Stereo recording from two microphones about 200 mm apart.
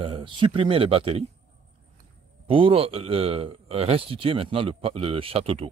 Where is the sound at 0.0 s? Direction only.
25° right (ahead or behind).